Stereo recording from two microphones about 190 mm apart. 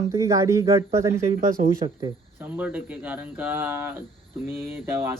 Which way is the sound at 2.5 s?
10° right (ahead or behind).